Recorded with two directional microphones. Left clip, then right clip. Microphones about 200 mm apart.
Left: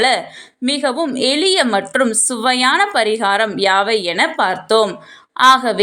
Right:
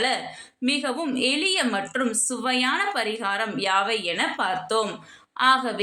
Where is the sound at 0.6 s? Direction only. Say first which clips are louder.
Left 8 dB; 35° left (ahead or behind).